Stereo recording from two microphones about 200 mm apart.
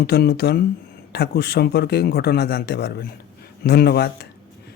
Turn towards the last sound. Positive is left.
turn(degrees=55)  # may be behind; listen again after turning